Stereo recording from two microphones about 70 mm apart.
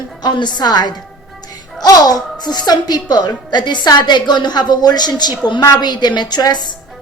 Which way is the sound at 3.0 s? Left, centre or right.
Left.